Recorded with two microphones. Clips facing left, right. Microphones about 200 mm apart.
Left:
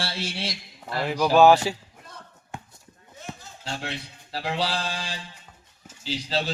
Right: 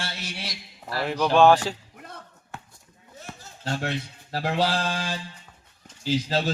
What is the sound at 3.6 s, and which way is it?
Speech, 45° right (ahead or behind).